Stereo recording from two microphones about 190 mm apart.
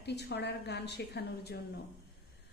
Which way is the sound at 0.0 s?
60° left (ahead or behind).